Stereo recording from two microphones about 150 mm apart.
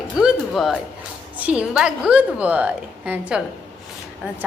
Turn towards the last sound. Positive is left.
turn(degrees=-5)  # may be behind; listen again after turning